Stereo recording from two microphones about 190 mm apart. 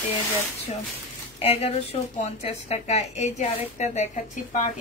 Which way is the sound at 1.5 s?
35° left (ahead or behind).